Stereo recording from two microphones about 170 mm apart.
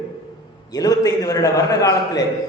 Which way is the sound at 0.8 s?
20° left (ahead or behind).